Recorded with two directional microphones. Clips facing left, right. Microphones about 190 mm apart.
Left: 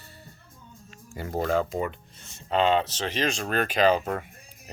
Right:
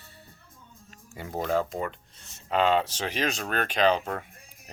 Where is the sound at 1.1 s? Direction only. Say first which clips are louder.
Left 2 dB; centre (ahead or behind).